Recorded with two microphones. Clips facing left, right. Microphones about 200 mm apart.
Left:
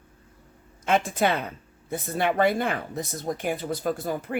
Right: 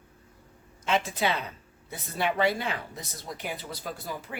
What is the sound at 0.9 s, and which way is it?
Speech, 50° left (ahead or behind).